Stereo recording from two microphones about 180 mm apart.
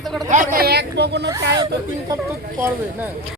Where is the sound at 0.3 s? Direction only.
50° right (ahead or behind); by 1.3 s 70° right (ahead or behind).